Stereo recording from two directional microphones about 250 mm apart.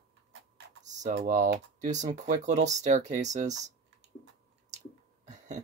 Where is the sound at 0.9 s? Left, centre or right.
Right.